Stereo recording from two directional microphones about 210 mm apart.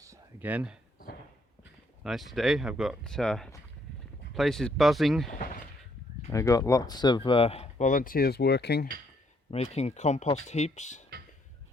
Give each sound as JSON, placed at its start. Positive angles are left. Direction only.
{"t": 0.0, "sound": "a sound", "side_deg": -10}
{"t": 2.0, "sound": "speech", "side_deg": 0}
{"t": 6.3, "sound": "speech", "side_deg": 15}
{"t": 9.5, "sound": "speech", "side_deg": 30}